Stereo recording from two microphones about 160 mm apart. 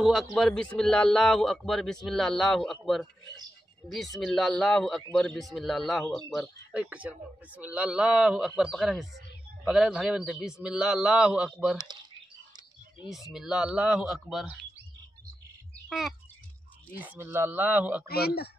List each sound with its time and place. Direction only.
0.0 s a man's voice: centre (ahead or behind)
13.1 s a man's voice: 5° right (ahead or behind)
15.9 s a man's voice: centre (ahead or behind)
17.0 s speech: 10° right (ahead or behind)
18.0 s speech: 75° left (ahead or behind)